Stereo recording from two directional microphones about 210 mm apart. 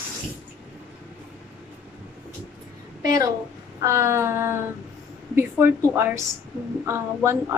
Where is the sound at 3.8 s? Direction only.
15° right (ahead or behind).